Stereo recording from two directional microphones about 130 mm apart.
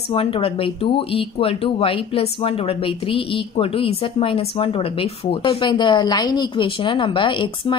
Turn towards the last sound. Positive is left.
turn(degrees=40)  # may be behind; listen again after turning